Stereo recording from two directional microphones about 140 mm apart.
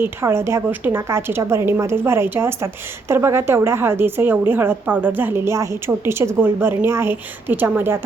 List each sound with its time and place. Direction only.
0.0 s a woman's voice: 15° right (ahead or behind)